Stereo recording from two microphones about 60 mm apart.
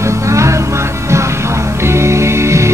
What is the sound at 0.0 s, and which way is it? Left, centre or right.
Music, right.